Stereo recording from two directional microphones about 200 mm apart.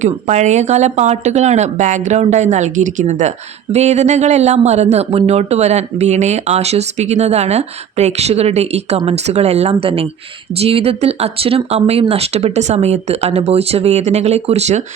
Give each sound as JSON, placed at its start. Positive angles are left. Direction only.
{"t": 0.0, "sound": "speech", "side_deg": -35}